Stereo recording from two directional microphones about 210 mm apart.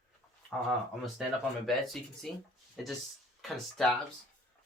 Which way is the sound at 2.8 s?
Centre (ahead or behind).